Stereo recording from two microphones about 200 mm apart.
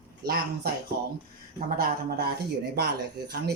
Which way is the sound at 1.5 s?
45° right (ahead or behind).